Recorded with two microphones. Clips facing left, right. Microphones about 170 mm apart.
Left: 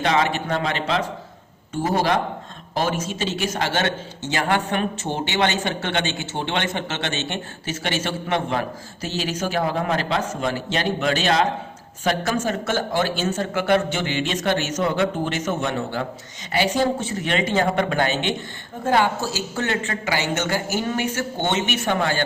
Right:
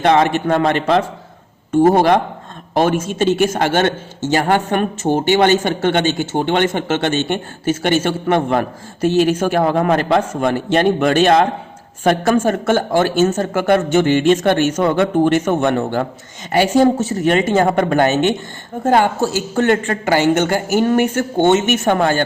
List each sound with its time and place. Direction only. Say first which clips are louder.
0.0 s a man's voice: right 7 dB; 50° right (ahead or behind)